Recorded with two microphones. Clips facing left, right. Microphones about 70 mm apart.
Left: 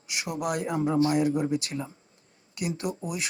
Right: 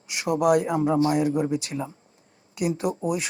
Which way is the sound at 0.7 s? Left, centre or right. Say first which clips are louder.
Right 3 dB; right.